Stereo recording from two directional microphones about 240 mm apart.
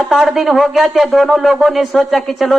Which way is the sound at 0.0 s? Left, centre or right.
Centre.